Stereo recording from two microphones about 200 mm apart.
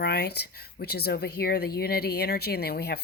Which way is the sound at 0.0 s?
55° left (ahead or behind).